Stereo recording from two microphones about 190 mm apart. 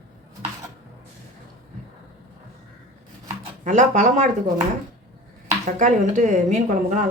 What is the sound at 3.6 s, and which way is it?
Speech, 40° right (ahead or behind).